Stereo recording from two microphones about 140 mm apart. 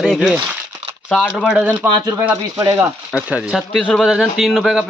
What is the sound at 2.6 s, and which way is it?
Speech, 20° right (ahead or behind).